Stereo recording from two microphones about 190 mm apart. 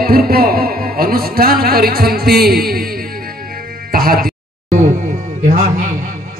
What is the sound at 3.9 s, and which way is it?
Music, 50° right (ahead or behind).